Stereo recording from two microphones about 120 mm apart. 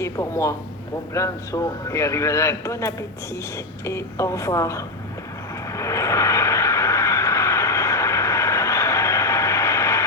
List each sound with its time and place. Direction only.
0.0 s a man's voice: 25° left (ahead or behind)
5.7 s vehicle: 25° left (ahead or behind)